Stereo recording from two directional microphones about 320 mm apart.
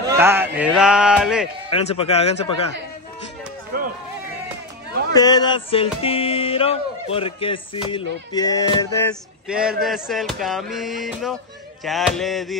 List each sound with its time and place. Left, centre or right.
0.2 s speech: centre
1.7 s speech: centre
3.7 s a sound: right
5.1 s music: centre
9.5 s speech: centre